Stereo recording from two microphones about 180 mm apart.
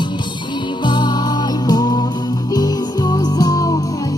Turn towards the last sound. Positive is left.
turn(degrees=20)  # may be behind; listen again after turning